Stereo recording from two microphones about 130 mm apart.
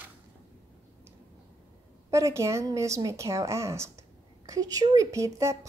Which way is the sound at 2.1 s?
20° right (ahead or behind).